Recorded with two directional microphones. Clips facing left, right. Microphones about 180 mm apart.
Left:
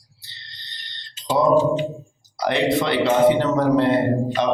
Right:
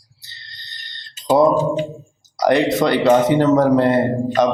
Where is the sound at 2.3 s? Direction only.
45° right (ahead or behind).